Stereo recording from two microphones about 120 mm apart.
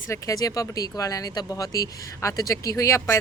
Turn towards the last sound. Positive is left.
turn(degrees=25)  # may be behind; listen again after turning